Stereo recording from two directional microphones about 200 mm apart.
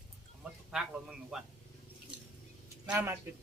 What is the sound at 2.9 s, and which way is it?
Speech, 10° right (ahead or behind).